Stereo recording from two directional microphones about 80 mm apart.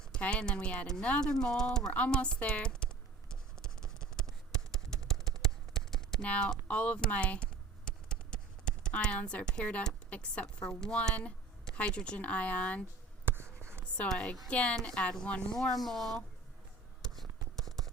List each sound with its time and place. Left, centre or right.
0.0 s speech: centre
1.9 s computer keyboard: centre
6.2 s a woman's voice: centre
13.2 s a sound: right
13.8 s a woman's voice: centre
17.0 s a sound: centre